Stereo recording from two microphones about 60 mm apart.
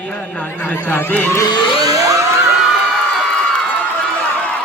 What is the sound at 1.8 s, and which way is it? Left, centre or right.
Music, right.